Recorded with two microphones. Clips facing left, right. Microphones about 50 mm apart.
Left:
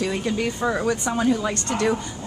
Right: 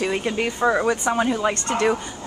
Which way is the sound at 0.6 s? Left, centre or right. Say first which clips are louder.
Right 3 dB; centre.